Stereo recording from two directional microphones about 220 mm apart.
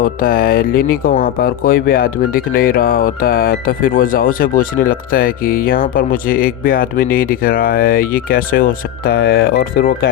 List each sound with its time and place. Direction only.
0.0 s speech: 40° left (ahead or behind)